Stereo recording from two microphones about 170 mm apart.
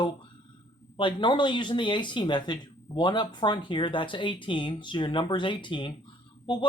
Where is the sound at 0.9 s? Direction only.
30° left (ahead or behind).